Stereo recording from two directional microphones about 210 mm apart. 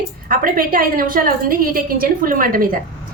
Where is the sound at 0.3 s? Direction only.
40° right (ahead or behind).